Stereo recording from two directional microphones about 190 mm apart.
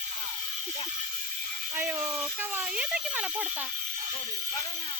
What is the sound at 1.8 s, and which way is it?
Speech, 10° right (ahead or behind).